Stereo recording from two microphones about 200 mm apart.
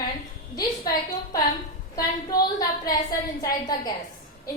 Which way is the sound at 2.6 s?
20° left (ahead or behind).